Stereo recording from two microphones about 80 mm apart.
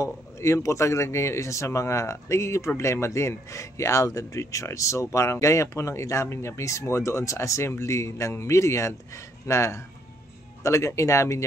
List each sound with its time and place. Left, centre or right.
0.0 s speech: left